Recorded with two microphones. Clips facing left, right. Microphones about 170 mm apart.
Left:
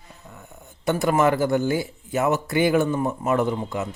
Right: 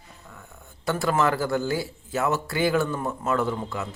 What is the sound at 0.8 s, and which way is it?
A man's voice, 20° left (ahead or behind).